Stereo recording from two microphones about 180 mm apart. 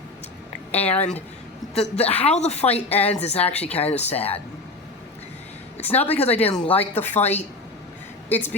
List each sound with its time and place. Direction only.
0.7 s a woman's voice: 35° left (ahead or behind)
5.7 s speech: 35° left (ahead or behind)
6.9 s speech: 10° left (ahead or behind)
7.2 s a woman's voice: 35° left (ahead or behind)
8.3 s speech: 10° left (ahead or behind)